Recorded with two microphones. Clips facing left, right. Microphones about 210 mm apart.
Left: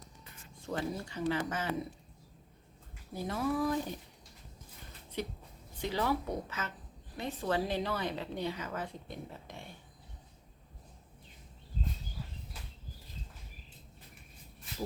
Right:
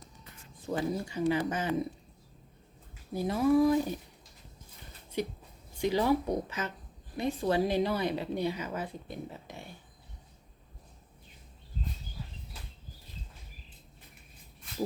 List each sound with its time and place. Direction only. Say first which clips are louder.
0.6 s a woman's voice: right 4 dB; 10° right (ahead or behind)
3.1 s a woman's voice: right 8 dB; 10° right (ahead or behind)
5.1 s a woman's voice: right 5 dB; 10° right (ahead or behind)